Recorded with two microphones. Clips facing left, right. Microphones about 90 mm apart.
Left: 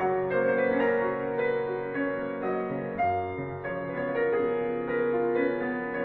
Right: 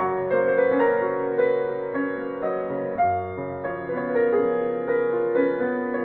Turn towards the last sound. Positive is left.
turn(degrees=-40)  # may be behind; listen again after turning